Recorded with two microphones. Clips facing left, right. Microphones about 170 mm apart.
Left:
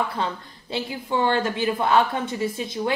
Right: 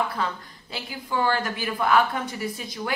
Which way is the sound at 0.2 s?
25° left (ahead or behind).